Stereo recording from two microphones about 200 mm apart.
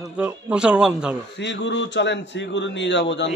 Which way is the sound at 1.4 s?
60° left (ahead or behind).